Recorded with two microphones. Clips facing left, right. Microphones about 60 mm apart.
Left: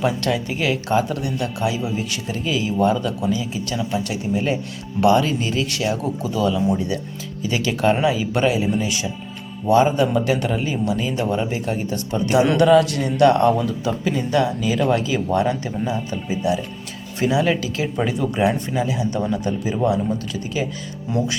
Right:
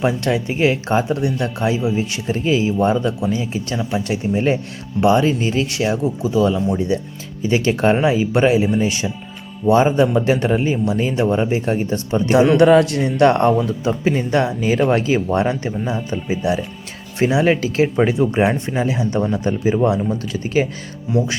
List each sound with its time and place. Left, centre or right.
0.0 s speech: right